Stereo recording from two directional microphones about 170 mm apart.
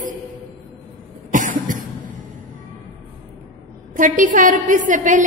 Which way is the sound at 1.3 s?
50° right (ahead or behind).